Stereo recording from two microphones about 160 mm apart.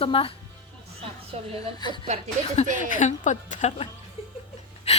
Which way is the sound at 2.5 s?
50° left (ahead or behind).